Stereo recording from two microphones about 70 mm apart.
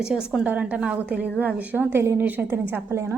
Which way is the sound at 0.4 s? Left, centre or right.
Centre.